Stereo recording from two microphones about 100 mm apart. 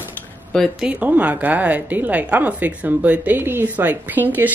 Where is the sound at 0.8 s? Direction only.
15° right (ahead or behind).